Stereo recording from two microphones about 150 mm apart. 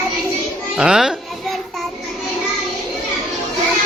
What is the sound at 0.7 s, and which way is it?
Music, 5° right (ahead or behind).